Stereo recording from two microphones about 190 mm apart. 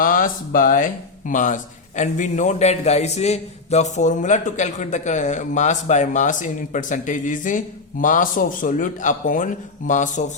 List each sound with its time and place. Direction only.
0.0 s speech: 45° left (ahead or behind)